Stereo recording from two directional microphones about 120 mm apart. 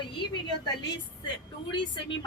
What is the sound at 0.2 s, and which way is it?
Speech, 35° left (ahead or behind).